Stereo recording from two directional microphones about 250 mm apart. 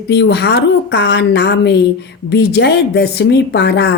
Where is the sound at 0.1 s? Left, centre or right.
Left.